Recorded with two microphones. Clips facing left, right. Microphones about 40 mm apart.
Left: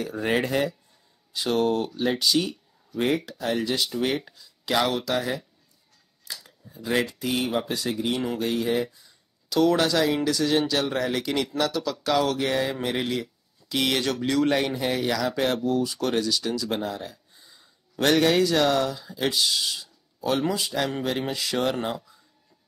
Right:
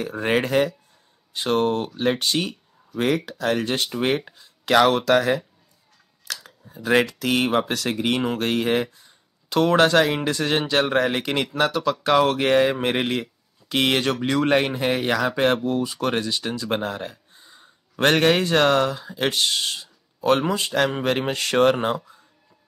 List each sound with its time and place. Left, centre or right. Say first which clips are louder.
0.0 s speech: right 3 dB; right
3.3 s speech: right 3 dB; right
4.6 s speech: right 7 dB; right
6.4 s a sound: right 4 dB; right
7.2 s speech: right 5 dB; right
9.5 s speech: right 4 dB; right